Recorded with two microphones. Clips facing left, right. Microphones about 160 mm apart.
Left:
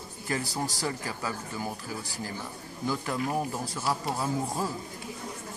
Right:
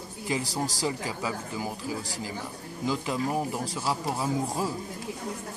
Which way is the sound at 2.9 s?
15° right (ahead or behind).